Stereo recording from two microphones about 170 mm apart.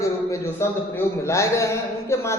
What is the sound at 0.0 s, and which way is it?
A man's voice, 15° left (ahead or behind).